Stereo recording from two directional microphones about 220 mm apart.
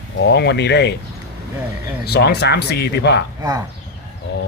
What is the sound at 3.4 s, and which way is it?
Speech, 15° right (ahead or behind).